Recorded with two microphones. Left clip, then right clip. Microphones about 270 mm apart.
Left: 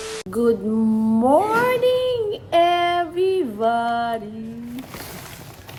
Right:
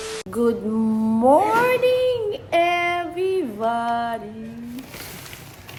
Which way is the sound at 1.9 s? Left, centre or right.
Right.